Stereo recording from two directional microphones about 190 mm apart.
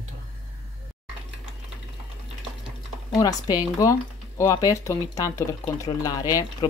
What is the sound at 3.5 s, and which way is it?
Speech, 20° left (ahead or behind).